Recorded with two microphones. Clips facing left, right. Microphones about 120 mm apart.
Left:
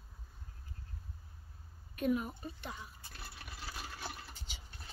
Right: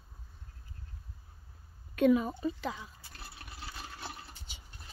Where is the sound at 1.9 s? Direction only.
90° right.